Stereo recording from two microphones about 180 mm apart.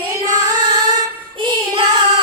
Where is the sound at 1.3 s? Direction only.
25° right (ahead or behind).